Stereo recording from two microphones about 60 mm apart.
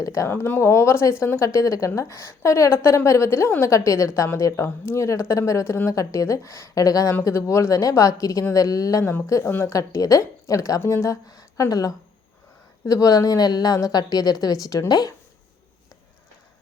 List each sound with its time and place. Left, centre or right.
0.0 s speech: left
0.3 s a woman's voice: left
1.4 s a woman's voice: left
4.5 s a woman's voice: left
5.9 s speech: left
7.3 s a woman's voice: left
9.2 s speech: left
9.5 s a woman's voice: left
9.7 s a woman's voice: left